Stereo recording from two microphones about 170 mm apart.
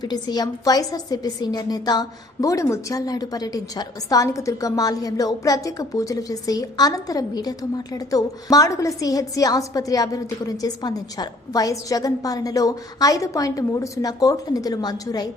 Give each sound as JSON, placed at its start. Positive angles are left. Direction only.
{"t": 0.0, "sound": "a woman's voice", "side_deg": 25}